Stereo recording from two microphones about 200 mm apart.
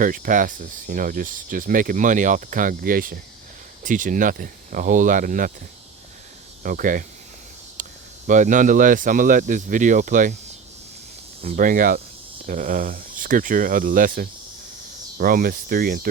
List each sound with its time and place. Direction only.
0.0 s speech: 40° right (ahead or behind)
6.6 s speech: 45° right (ahead or behind)
7.8 s cricket: 40° right (ahead or behind)
8.3 s speech: 40° right (ahead or behind)
11.4 s speech: 40° right (ahead or behind)